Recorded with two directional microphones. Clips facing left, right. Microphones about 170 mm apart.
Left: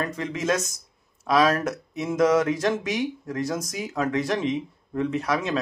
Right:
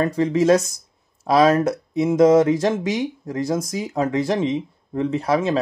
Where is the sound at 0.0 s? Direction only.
30° right (ahead or behind).